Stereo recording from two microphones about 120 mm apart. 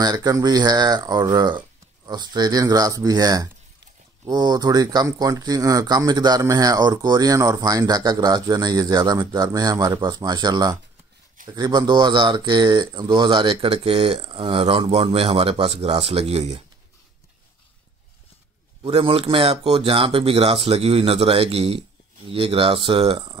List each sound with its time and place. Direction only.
0.0 s speech: 35° right (ahead or behind); by 16.6 s 60° right (ahead or behind)
18.8 s speech: 50° right (ahead or behind)